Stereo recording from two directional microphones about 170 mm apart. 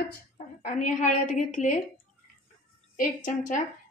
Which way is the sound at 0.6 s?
50° left (ahead or behind).